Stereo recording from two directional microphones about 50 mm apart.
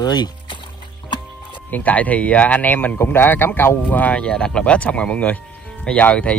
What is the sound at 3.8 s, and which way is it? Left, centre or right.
Speech, left.